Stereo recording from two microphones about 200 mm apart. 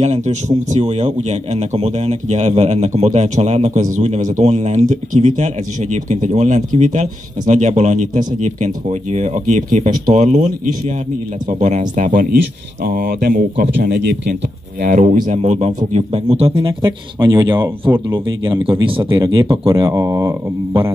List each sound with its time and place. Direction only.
0.0 s speech: 35° right (ahead or behind); by 20.9 s 15° right (ahead or behind)